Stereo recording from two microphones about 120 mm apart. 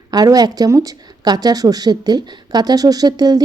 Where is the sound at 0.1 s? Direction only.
35° right (ahead or behind).